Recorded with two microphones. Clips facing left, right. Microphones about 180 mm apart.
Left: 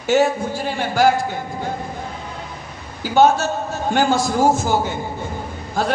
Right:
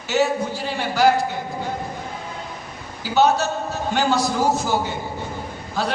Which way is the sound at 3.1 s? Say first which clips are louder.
Left 3 dB; 50° left (ahead or behind).